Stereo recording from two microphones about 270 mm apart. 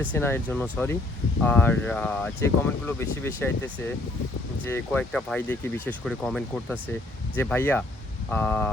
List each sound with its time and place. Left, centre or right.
0.0 s speech: centre